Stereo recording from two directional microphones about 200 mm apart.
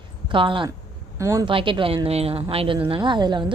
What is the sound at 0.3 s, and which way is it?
A woman's voice, 25° right (ahead or behind).